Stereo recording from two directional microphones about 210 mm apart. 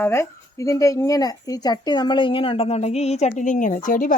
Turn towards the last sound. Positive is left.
turn(degrees=40)  # may be behind; listen again after turning